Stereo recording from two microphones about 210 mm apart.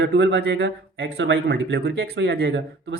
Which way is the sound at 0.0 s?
55° right (ahead or behind).